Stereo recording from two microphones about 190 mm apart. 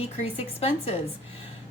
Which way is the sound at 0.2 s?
35° left (ahead or behind).